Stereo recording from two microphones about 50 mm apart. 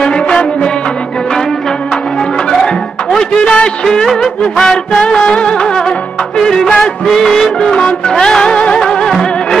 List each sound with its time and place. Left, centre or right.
0.0 s music: centre
2.5 s music: centre
3.2 s music: centre